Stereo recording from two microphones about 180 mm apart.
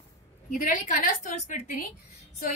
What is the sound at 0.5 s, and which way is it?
A woman's voice, 45° left (ahead or behind).